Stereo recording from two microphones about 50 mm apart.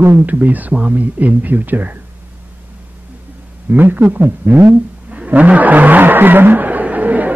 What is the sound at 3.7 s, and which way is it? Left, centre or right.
Speech, right.